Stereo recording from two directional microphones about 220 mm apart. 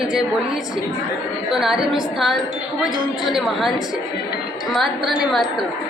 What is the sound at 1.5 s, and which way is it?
A woman's voice, centre (ahead or behind).